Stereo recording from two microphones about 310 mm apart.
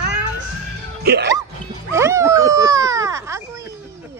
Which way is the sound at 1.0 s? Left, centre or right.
Right.